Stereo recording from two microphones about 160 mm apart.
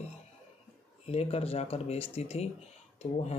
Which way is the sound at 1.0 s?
40° left (ahead or behind).